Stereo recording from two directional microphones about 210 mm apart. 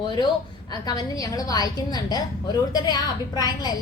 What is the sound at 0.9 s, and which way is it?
A woman's voice, 20° left (ahead or behind).